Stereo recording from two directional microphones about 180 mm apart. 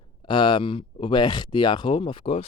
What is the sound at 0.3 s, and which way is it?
Speech, 25° left (ahead or behind).